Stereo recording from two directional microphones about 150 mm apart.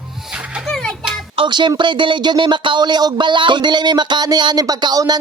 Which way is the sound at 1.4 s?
30° right (ahead or behind).